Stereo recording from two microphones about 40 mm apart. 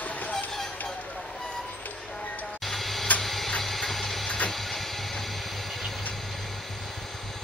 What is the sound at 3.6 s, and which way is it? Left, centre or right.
Ratchet, centre.